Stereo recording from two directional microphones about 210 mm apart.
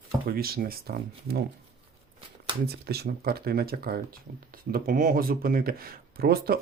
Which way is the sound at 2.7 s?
50° right (ahead or behind).